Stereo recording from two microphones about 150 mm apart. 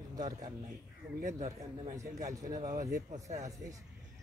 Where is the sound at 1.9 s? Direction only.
20° right (ahead or behind).